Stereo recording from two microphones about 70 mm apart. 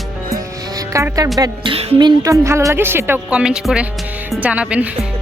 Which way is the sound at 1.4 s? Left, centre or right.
Right.